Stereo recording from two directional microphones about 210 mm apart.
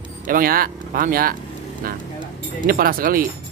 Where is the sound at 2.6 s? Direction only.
45° right (ahead or behind).